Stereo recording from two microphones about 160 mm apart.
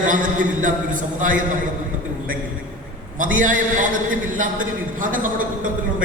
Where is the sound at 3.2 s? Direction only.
55° right (ahead or behind).